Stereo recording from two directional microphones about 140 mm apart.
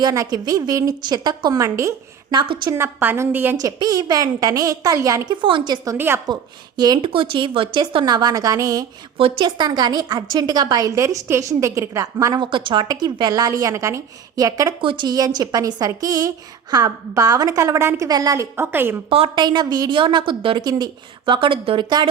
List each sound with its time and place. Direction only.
0.0 s a woman's voice: 25° right (ahead or behind)
2.3 s a woman's voice: 35° right (ahead or behind)
2.7 s a woman's voice: 15° right (ahead or behind)
3.6 s a woman's voice: 30° right (ahead or behind)
6.2 s a woman's voice: 30° right (ahead or behind)
9.1 s a woman's voice: 40° right (ahead or behind)
14.8 s a woman's voice: 35° right (ahead or behind); by 18.9 s 15° right (ahead or behind)
19.1 s a woman's voice: 40° right (ahead or behind)